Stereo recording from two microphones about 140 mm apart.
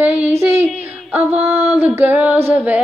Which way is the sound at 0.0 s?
10° right (ahead or behind).